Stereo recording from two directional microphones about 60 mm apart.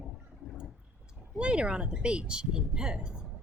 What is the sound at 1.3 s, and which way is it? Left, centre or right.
A woman's voice, centre.